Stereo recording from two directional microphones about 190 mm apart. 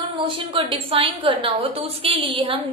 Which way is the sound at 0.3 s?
25° right (ahead or behind).